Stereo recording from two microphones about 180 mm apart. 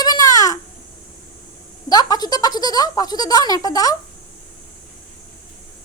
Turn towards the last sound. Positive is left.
turn(degrees=20)  # may be behind; listen again after turning